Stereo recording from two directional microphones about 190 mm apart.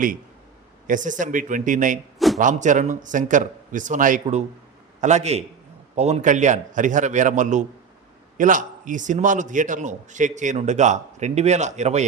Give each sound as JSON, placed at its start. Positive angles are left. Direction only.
{"t": 0.9, "sound": "a man's voice", "side_deg": -40}
{"t": 2.1, "sound": "a sound", "side_deg": 0}
{"t": 2.4, "sound": "a man's voice", "side_deg": -40}